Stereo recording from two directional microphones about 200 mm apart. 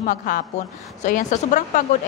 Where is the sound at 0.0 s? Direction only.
45° left (ahead or behind).